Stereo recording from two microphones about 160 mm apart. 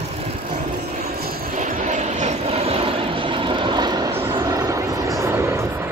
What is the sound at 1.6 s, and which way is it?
Vehicle, 50° right (ahead or behind).